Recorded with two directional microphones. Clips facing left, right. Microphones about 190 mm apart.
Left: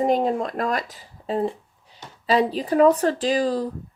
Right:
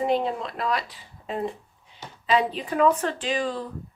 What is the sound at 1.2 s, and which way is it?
Speech, 35° left (ahead or behind).